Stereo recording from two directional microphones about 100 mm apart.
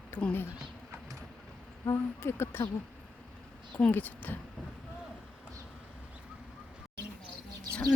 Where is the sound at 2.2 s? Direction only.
25° left (ahead or behind).